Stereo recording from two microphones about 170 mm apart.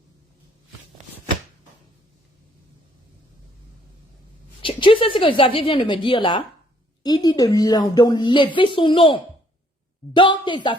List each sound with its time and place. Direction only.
4.6 s speech: 30° left (ahead or behind)